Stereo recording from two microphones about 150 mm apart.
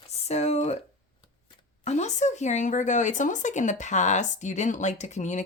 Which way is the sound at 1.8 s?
50° left (ahead or behind).